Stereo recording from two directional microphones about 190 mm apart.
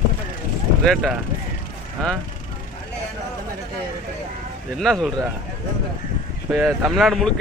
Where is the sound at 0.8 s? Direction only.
Centre (ahead or behind).